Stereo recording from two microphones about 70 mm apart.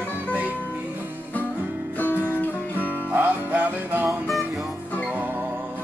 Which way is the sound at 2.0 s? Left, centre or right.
Left.